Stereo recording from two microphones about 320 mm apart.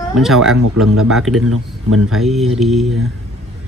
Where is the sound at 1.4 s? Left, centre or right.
Right.